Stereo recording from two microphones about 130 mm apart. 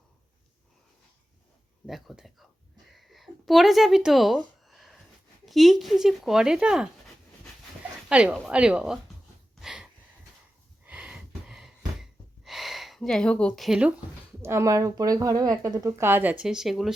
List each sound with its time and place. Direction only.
1.9 s speech: centre (ahead or behind)
2.9 s a sound: centre (ahead or behind)
5.5 s speech: centre (ahead or behind)
8.1 s speech: 10° right (ahead or behind)
9.6 s a sound: 5° right (ahead or behind)
12.5 s gasp: centre (ahead or behind)
13.7 s speech: 10° right (ahead or behind)
14.4 s a woman's voice: 20° right (ahead or behind); by 16.9 s centre (ahead or behind)